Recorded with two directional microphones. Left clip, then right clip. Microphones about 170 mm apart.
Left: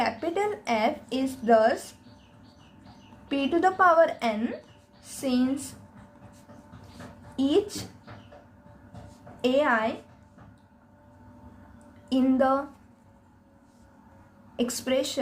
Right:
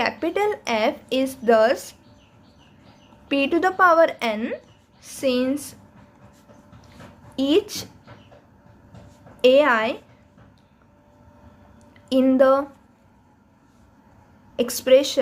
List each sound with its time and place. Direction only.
0.0 s a woman's voice: 40° right (ahead or behind)
3.2 s a woman's voice: 40° right (ahead or behind)
7.3 s a woman's voice: 40° right (ahead or behind)
9.4 s a woman's voice: 40° right (ahead or behind)
12.0 s a woman's voice: 40° right (ahead or behind)
14.5 s a woman's voice: 40° right (ahead or behind)